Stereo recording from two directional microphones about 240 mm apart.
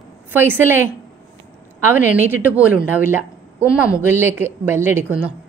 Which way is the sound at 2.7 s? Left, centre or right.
Centre.